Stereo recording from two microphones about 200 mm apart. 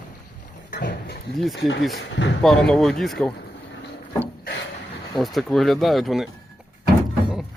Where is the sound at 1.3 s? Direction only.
Centre (ahead or behind).